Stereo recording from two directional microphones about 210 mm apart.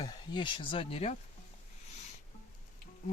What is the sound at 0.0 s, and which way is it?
Speech, 20° left (ahead or behind).